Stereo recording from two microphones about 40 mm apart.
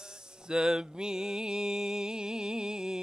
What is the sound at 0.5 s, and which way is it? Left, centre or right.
Music, centre.